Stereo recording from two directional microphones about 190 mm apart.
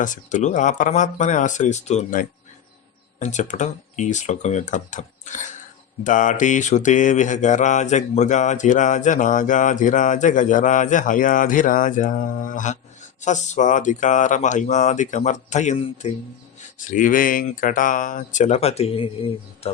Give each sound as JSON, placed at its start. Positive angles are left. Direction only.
{"t": 0.0, "sound": "mantra", "side_deg": 40}
{"t": 16.8, "sound": "speech", "side_deg": 45}